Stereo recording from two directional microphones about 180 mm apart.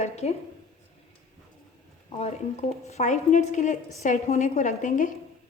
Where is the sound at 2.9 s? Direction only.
40° left (ahead or behind).